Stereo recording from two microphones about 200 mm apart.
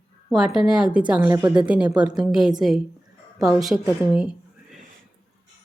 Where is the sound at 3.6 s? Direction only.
Centre (ahead or behind).